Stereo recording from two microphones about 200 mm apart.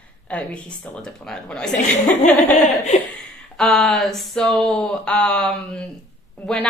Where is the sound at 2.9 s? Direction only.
35° left (ahead or behind).